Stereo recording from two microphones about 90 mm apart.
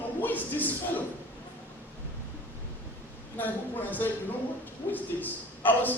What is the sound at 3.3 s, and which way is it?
A man's voice, 20° left (ahead or behind).